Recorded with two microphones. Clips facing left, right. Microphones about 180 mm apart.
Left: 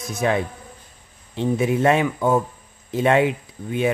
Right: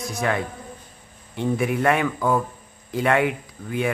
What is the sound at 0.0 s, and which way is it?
Speech, 20° left (ahead or behind).